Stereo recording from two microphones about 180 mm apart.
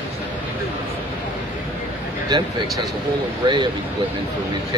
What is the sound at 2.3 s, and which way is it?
Speech, 25° right (ahead or behind).